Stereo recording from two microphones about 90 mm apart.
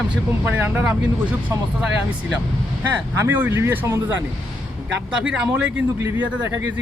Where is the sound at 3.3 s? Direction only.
25° right (ahead or behind).